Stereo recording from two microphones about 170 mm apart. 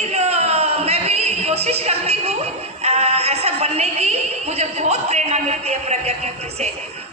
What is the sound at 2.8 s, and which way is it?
A woman's voice, 40° right (ahead or behind).